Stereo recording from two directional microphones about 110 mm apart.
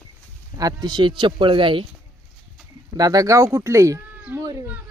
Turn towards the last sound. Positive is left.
turn(degrees=-30)  # may be behind; listen again after turning